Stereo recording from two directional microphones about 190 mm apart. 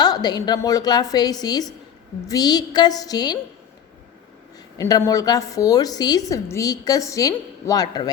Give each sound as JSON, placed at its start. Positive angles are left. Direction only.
{"t": 0.0, "sound": "a woman's voice", "side_deg": 20}
{"t": 4.8, "sound": "a woman's voice", "side_deg": 15}